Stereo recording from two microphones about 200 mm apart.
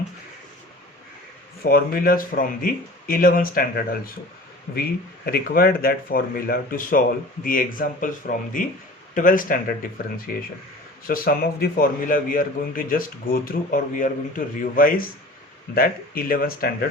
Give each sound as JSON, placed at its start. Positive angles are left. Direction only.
{"t": 1.6, "sound": "a man's voice", "side_deg": 50}